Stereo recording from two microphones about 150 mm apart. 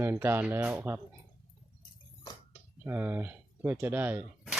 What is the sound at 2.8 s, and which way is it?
Speech, 15° right (ahead or behind).